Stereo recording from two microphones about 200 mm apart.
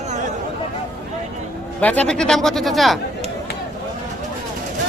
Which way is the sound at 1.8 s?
5° left (ahead or behind).